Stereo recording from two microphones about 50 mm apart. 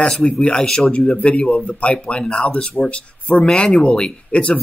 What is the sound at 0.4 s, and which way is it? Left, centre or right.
Speech, centre.